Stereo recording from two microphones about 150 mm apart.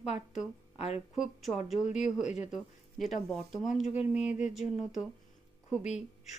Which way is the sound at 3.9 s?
50° left (ahead or behind).